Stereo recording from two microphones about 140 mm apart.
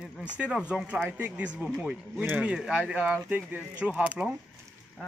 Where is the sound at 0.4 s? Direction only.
5° right (ahead or behind).